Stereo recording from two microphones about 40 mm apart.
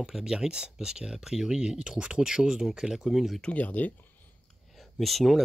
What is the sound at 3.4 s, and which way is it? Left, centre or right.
Speech, left.